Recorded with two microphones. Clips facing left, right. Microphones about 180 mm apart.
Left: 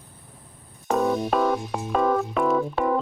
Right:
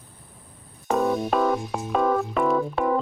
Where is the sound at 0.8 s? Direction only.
Centre (ahead or behind).